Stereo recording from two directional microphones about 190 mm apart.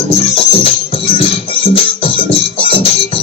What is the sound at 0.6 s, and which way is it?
Music, 30° left (ahead or behind).